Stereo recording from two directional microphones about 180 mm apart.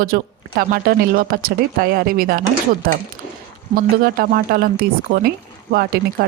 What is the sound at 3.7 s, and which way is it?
Speech, 55° right (ahead or behind).